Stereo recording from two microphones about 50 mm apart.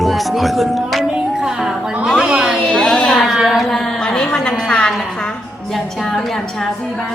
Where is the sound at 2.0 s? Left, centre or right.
Centre.